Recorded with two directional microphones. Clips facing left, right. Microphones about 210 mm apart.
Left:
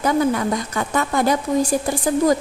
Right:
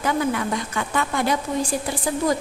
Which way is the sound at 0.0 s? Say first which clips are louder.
Left 4 dB; 40° left (ahead or behind).